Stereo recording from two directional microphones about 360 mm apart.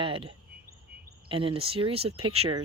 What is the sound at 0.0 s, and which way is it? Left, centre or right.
Speech, centre.